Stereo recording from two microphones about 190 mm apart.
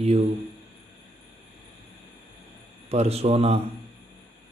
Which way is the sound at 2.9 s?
35° right (ahead or behind).